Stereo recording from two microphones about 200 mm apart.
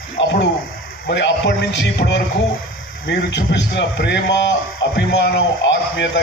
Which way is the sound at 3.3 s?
60° left (ahead or behind).